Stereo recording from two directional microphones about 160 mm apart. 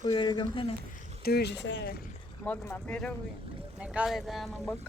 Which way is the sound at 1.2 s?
85° left.